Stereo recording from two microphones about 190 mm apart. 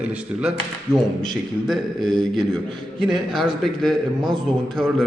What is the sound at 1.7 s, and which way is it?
A man's voice, centre (ahead or behind).